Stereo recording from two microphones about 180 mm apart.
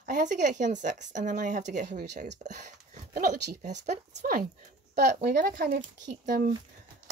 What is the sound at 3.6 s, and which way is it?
Speech, 40° right (ahead or behind).